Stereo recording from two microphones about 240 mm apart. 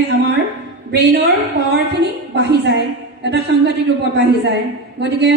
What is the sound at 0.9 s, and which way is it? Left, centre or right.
A woman's voice, right.